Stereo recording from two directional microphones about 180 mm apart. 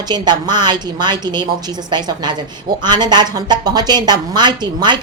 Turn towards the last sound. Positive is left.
turn(degrees=-25)  # may be behind; listen again after turning